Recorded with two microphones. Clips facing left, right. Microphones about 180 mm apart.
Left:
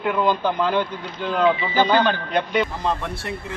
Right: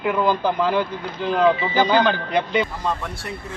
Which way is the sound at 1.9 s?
10° right (ahead or behind).